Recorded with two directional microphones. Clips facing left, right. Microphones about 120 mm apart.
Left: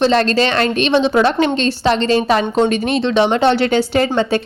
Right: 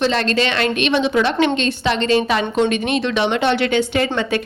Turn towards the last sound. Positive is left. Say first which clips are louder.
# left 4 dB
turn(degrees=30)  # may be behind; listen again after turning